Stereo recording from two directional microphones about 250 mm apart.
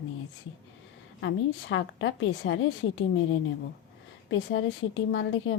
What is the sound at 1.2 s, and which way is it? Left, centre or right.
Speech, left.